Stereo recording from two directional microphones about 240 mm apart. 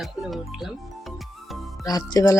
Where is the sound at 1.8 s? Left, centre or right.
Centre.